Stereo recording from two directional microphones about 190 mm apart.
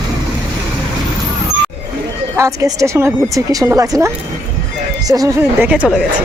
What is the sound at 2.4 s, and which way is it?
Speech, 15° right (ahead or behind).